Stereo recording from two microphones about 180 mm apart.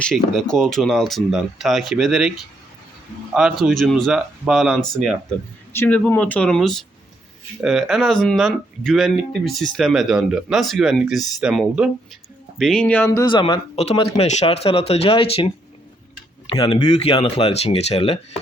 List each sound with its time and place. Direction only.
0.0 s speech: 5° left (ahead or behind)
5.7 s speech: 10° left (ahead or behind); by 18.2 s 35° left (ahead or behind)